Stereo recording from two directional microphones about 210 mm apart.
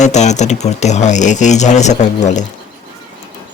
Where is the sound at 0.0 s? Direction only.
35° left (ahead or behind).